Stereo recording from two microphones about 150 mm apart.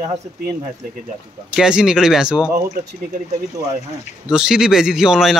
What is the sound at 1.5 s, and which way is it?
A man's voice, 5° right (ahead or behind).